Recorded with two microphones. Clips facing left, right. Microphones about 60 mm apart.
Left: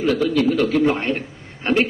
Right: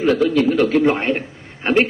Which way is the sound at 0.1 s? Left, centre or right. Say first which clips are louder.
Right 2 dB; centre.